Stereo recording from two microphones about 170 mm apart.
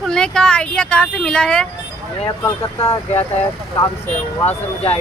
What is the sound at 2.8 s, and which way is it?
Speech, 20° left (ahead or behind).